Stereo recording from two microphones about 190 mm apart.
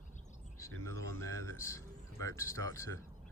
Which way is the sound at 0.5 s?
15° left (ahead or behind).